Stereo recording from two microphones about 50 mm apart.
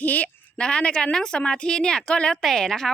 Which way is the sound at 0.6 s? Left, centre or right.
Left.